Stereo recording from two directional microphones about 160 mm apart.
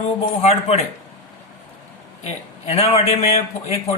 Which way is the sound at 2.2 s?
40° left (ahead or behind).